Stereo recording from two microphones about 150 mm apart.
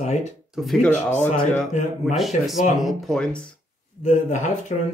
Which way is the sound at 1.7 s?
50° left (ahead or behind).